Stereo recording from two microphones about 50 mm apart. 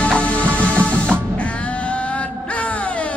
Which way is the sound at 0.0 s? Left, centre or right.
Left.